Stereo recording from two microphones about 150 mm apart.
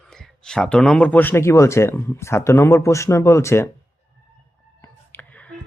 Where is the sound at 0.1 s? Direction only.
5° left (ahead or behind).